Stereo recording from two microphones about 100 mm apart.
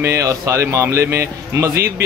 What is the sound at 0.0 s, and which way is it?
A man's voice, 30° right (ahead or behind).